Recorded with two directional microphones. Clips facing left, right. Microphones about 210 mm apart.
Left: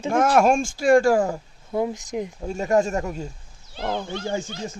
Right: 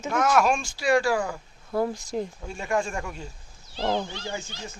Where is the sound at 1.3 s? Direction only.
20° left (ahead or behind).